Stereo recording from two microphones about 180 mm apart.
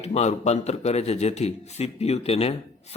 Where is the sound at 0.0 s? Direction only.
35° left (ahead or behind).